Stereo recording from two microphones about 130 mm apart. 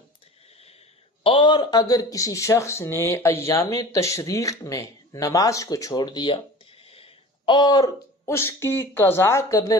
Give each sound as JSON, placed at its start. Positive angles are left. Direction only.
{"t": 1.2, "sound": "speech", "side_deg": 40}
{"t": 8.3, "sound": "speech", "side_deg": 20}